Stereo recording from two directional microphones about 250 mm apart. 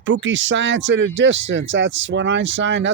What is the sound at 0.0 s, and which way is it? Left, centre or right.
Speech, right.